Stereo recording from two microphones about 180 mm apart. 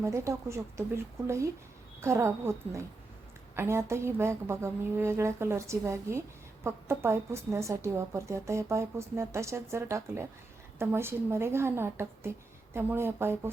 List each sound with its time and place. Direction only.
0.0 s speech: 15° right (ahead or behind)